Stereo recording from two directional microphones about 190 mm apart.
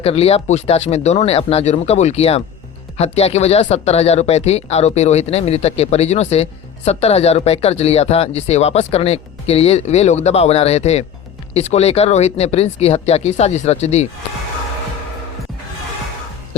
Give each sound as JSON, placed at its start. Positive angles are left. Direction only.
{"t": 0.0, "sound": "speech", "side_deg": 30}